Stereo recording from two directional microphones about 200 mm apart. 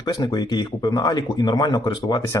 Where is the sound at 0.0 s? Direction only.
20° left (ahead or behind).